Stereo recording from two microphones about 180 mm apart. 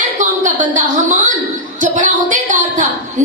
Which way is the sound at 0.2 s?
45° right (ahead or behind).